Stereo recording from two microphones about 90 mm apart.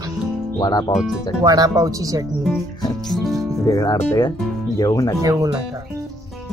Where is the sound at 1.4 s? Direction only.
40° right (ahead or behind).